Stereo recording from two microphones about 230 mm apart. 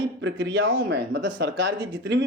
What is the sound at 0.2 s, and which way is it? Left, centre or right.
Speech, right.